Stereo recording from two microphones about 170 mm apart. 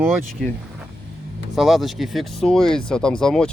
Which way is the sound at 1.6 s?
Centre (ahead or behind).